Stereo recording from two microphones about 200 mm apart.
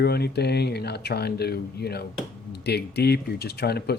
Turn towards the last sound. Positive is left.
turn(degrees=55)  # may be behind; listen again after turning